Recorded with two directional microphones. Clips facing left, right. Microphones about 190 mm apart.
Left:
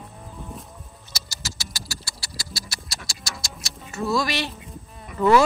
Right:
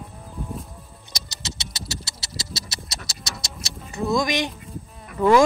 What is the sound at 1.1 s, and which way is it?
Patter, 20° right (ahead or behind).